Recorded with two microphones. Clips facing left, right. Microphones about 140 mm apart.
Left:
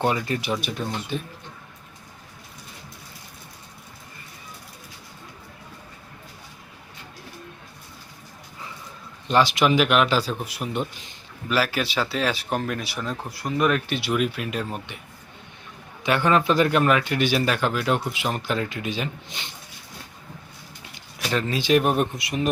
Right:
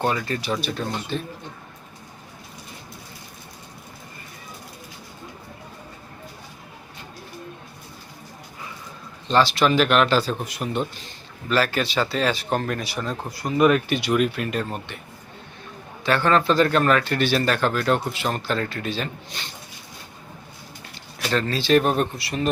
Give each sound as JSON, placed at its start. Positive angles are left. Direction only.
{"t": 0.0, "sound": "speech", "side_deg": 20}
{"t": 9.2, "sound": "a man's voice", "side_deg": 15}
{"t": 16.0, "sound": "a man's voice", "side_deg": 15}
{"t": 20.9, "sound": "speech", "side_deg": 15}